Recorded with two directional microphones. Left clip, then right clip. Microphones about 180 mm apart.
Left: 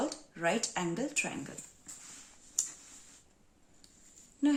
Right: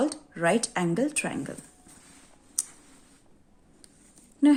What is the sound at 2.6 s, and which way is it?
Tick-tock, 45° right (ahead or behind).